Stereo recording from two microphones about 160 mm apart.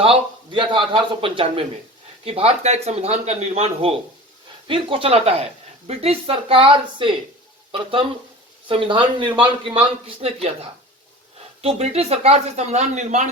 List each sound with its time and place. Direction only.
0.0 s a man's voice: 35° right (ahead or behind)
11.6 s a man's voice: 40° right (ahead or behind)